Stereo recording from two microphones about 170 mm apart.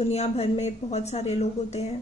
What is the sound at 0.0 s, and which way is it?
A woman's voice, 40° left (ahead or behind).